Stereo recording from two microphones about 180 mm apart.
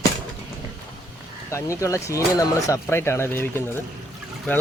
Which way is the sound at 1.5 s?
15° left (ahead or behind).